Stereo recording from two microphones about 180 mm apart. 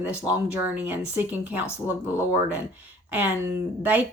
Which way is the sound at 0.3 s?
10° right (ahead or behind).